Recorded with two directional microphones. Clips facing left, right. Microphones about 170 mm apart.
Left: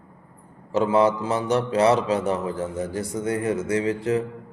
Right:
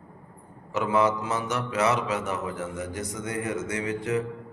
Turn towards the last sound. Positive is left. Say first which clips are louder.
# left 5 dB
turn(degrees=30)  # may be behind; listen again after turning